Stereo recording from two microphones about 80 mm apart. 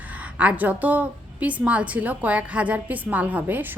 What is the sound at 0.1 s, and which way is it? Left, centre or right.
A woman's voice, centre.